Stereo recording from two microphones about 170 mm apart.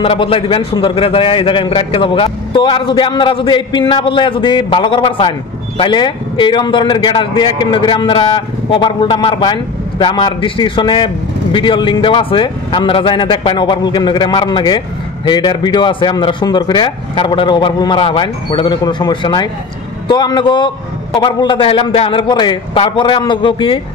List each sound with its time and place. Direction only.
0.0 s a man's voice: 30° left (ahead or behind)